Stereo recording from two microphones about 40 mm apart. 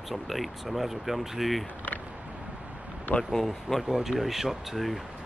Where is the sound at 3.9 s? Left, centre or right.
Centre.